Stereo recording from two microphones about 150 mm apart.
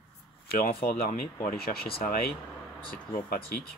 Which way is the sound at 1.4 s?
85° left.